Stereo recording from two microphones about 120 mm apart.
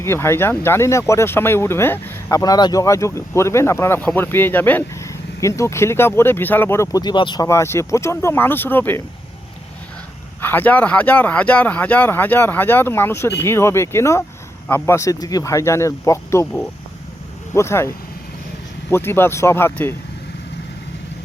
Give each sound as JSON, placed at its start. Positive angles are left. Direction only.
{"t": 0.0, "sound": "speech", "side_deg": 20}
{"t": 2.4, "sound": "speech", "side_deg": 35}
{"t": 7.4, "sound": "speech", "side_deg": 25}
{"t": 10.4, "sound": "speech", "side_deg": 15}
{"t": 17.5, "sound": "speech", "side_deg": 20}